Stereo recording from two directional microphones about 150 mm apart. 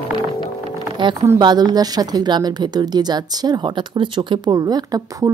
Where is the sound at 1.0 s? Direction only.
30° right (ahead or behind).